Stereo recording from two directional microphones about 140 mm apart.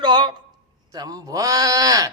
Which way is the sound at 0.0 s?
30° right (ahead or behind).